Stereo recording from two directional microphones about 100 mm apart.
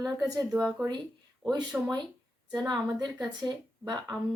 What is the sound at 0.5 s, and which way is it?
Speech, 25° right (ahead or behind).